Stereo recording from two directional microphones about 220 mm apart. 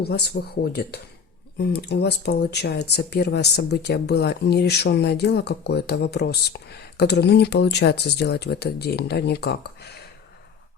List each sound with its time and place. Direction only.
0.0 s speech: 45° left (ahead or behind)